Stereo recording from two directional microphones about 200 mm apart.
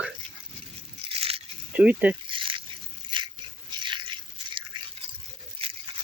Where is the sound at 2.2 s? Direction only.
25° right (ahead or behind).